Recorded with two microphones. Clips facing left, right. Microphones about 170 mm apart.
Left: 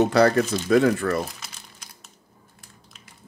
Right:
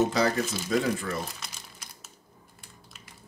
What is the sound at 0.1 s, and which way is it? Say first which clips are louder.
Speech: left 8 dB; 65° left (ahead or behind).